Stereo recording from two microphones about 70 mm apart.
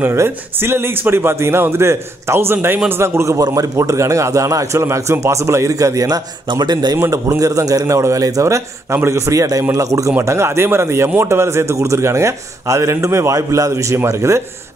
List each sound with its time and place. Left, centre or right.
0.0 s a man's voice: right
3.3 s a man's voice: right
7.0 s a man's voice: right